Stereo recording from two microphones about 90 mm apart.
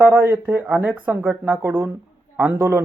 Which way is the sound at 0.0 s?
20° right (ahead or behind).